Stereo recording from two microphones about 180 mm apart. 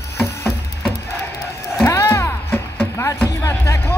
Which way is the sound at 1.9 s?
15° left (ahead or behind).